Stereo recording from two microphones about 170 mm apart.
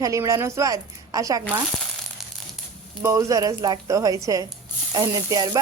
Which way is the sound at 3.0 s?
20° right (ahead or behind).